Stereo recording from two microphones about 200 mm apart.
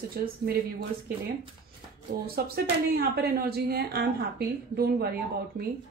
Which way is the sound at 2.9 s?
50° right (ahead or behind).